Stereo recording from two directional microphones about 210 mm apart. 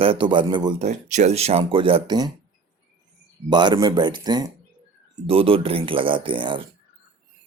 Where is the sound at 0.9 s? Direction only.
35° right (ahead or behind).